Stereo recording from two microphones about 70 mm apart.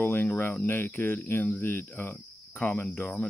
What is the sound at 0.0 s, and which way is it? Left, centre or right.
Speech, left.